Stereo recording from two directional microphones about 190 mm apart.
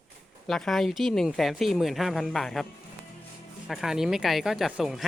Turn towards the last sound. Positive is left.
turn(degrees=0)  # may be behind; listen again after turning